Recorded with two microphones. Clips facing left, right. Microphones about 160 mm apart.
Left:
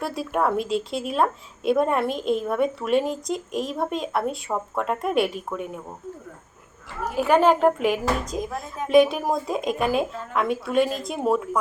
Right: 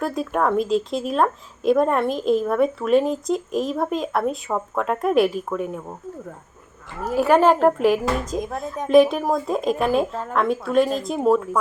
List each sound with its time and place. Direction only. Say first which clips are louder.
0.1 s speech: right 2 dB; 5° left (ahead or behind)
7.3 s speech: right 2 dB; 5° right (ahead or behind)